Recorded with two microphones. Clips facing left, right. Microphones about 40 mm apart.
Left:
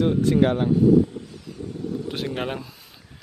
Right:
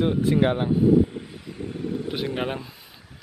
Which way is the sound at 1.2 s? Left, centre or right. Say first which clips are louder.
Right 1 dB; right.